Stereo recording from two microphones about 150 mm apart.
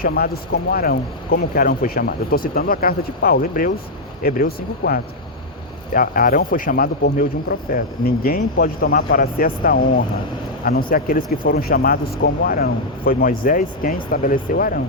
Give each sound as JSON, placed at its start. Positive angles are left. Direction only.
{"t": 0.0, "sound": "speech", "side_deg": 90}
{"t": 5.9, "sound": "speech", "side_deg": 70}